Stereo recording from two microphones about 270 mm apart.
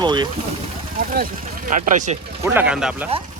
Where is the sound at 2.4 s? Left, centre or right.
Centre.